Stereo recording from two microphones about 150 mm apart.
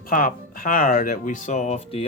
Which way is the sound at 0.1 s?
70° left (ahead or behind).